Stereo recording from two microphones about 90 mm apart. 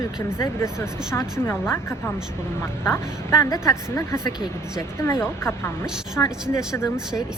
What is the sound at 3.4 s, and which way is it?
Speech, 35° left (ahead or behind).